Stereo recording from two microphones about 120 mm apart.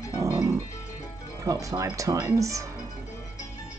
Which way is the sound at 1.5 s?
25° right (ahead or behind).